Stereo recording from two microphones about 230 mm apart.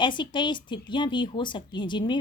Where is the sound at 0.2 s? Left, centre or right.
Centre.